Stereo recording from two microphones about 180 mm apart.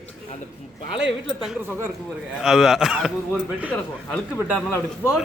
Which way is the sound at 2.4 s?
5° right (ahead or behind).